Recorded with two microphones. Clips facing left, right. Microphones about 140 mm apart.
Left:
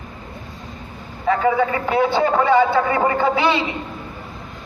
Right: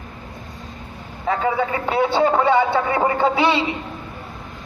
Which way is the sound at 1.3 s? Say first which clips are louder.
Left 3 dB; 25° right (ahead or behind).